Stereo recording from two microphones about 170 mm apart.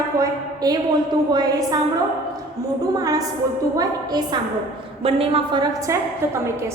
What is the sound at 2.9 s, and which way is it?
A woman's voice, 20° right (ahead or behind).